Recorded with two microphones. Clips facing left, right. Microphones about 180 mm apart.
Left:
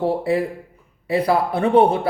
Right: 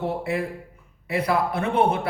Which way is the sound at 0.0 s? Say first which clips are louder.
Left 6 dB; 35° left (ahead or behind).